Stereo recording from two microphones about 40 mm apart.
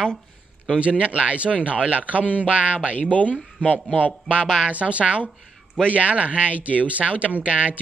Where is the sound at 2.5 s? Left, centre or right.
Right.